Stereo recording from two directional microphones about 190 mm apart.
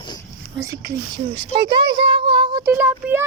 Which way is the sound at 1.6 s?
65° right (ahead or behind).